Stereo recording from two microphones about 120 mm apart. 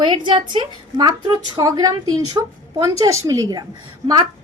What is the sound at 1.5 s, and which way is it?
Speech, 30° right (ahead or behind).